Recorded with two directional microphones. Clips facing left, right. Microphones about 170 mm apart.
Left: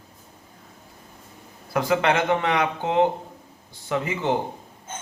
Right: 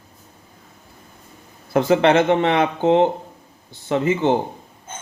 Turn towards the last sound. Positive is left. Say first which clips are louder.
# right 6 dB
turn(degrees=-25)  # may be behind; listen again after turning